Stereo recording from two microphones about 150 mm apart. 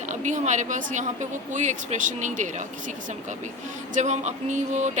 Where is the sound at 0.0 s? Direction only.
55° right (ahead or behind).